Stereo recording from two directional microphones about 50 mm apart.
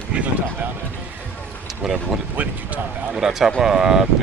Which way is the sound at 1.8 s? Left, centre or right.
Centre.